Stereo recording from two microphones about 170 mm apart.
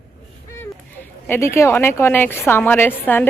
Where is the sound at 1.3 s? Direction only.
15° left (ahead or behind).